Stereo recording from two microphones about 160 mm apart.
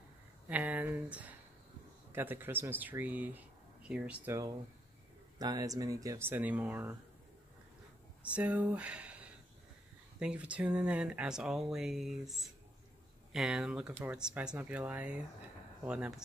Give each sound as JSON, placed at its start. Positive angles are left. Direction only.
{"t": 0.5, "sound": "a sound", "side_deg": -10}
{"t": 2.1, "sound": "speech", "side_deg": -15}
{"t": 5.4, "sound": "speech", "side_deg": -25}
{"t": 8.2, "sound": "speech", "side_deg": -10}